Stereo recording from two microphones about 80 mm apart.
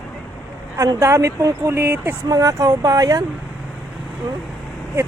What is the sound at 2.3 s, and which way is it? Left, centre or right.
Speech, right.